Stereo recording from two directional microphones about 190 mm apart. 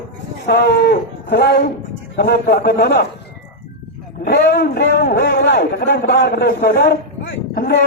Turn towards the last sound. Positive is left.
turn(degrees=55)  # may be behind; listen again after turning